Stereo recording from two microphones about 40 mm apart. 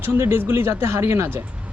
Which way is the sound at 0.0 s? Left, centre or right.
Right.